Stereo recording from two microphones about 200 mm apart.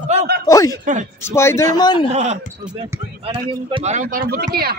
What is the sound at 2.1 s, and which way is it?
Speech, 35° right (ahead or behind).